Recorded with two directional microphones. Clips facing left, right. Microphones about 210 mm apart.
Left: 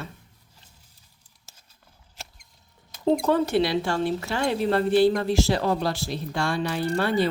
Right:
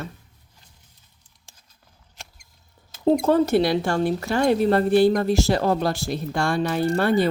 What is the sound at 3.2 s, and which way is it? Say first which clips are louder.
A woman's voice: right 3 dB; 40° right (ahead or behind).